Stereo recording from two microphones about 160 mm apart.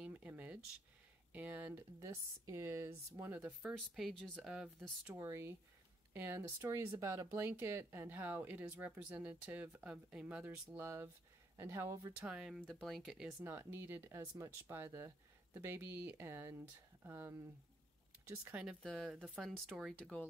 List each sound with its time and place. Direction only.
0.0 s a sound: 10° right (ahead or behind)
1.3 s speech: 10° right (ahead or behind)
3.3 s speech: 5° right (ahead or behind)
5.0 s speech: 15° right (ahead or behind)
12.3 s speech: 5° right (ahead or behind)
13.4 s speech: 15° right (ahead or behind); by 20.2 s 5° left (ahead or behind)